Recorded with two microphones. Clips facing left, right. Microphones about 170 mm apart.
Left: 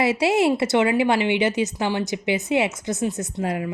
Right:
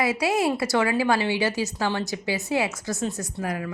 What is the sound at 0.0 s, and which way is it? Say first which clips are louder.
A woman's voice: left 4 dB; 25° left (ahead or behind).